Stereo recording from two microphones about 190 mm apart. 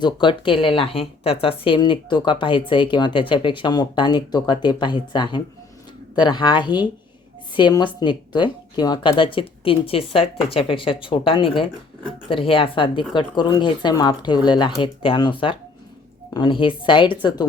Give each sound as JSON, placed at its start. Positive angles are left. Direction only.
{"t": 0.0, "sound": "speech", "side_deg": 25}